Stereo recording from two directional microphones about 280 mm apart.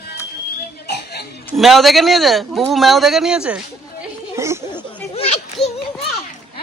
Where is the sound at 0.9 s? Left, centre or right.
Left.